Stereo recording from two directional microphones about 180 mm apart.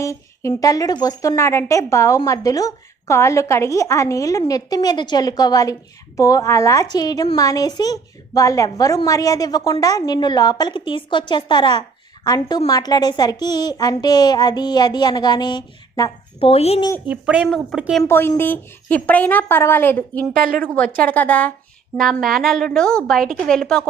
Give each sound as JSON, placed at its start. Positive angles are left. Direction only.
{"t": 0.0, "sound": "a woman's voice", "side_deg": 15}
{"t": 16.5, "sound": "a woman's voice", "side_deg": 35}
{"t": 17.1, "sound": "a woman's voice", "side_deg": -5}
{"t": 18.0, "sound": "speech", "side_deg": 15}
{"t": 20.4, "sound": "a woman's voice", "side_deg": -50}
{"t": 20.7, "sound": "a woman's voice", "side_deg": 10}